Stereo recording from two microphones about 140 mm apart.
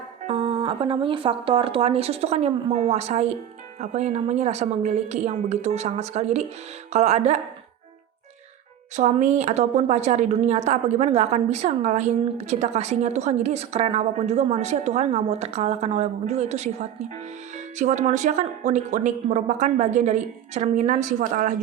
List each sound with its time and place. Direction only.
0.3 s a woman's voice: 40° right (ahead or behind)
9.0 s a woman's voice: 55° right (ahead or behind)
17.7 s speech: 55° right (ahead or behind)